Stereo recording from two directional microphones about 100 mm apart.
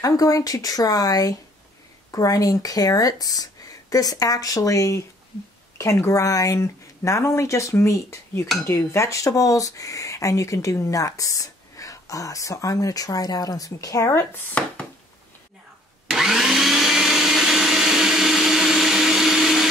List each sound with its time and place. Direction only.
0.0 s speech: 35° left (ahead or behind)
16.1 s vacuum cleaner: 5° right (ahead or behind)